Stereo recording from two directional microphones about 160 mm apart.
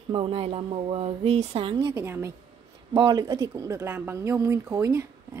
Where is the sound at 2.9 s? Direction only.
25° right (ahead or behind).